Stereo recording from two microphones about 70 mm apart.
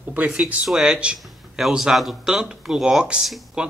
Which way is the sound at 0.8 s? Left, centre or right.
Centre.